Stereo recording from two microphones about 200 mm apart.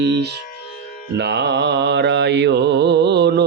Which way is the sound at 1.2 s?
55° right (ahead or behind).